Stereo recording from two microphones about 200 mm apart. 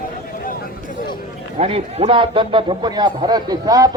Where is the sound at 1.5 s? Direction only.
30° right (ahead or behind).